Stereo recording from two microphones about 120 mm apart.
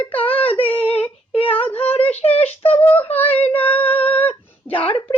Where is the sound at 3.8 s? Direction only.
15° left (ahead or behind).